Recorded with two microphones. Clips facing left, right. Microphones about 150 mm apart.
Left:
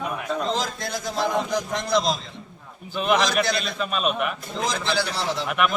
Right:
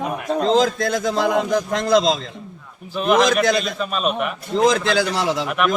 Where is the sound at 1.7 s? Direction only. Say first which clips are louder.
Right 7 dB; 90° right.